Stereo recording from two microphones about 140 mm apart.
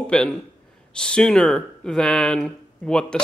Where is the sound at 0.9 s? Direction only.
5° left (ahead or behind).